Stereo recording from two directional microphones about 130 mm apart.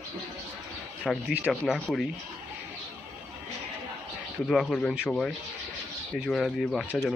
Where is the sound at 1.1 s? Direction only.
Centre (ahead or behind).